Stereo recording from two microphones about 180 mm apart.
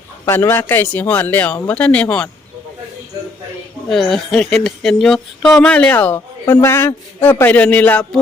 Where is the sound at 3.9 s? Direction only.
Centre (ahead or behind).